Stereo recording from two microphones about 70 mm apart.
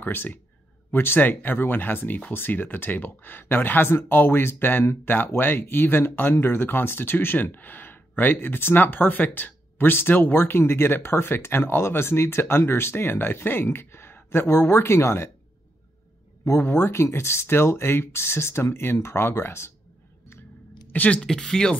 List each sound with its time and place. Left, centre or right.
0.0 s speech: left
16.4 s speech: left
20.9 s speech: left
21.2 s speech: centre